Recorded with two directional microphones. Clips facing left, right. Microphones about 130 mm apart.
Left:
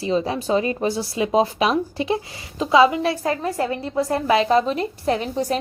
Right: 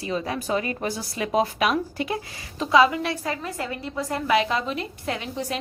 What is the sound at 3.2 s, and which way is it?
A woman's voice, 35° left (ahead or behind).